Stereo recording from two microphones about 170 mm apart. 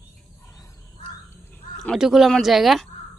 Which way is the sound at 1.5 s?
5° left (ahead or behind).